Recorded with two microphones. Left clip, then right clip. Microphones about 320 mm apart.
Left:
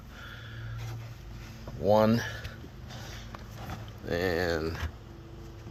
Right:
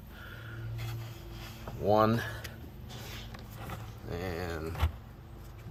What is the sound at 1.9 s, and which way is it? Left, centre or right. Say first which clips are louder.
Speech: left 2 dB; centre.